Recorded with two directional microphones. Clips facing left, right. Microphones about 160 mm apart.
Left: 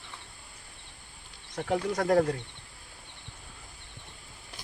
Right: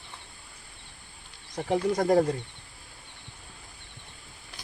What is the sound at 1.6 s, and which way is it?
Speech, 20° right (ahead or behind).